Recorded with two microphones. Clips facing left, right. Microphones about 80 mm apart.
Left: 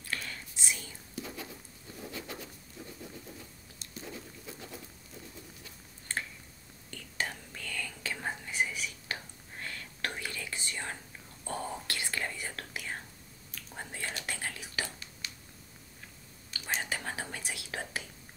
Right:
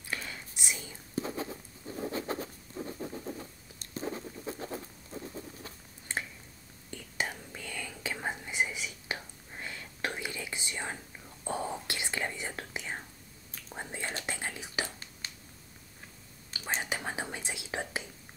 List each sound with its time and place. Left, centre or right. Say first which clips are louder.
0.0 s whispering: even; centre
1.1 s writing: right 7 dB; right
5.1 s patter: right 8 dB; right
6.1 s a sound: right 1 dB; centre
6.9 s whispering: right 1 dB; centre
15.2 s a sound: even; right
16.8 s whispering: right 2 dB; centre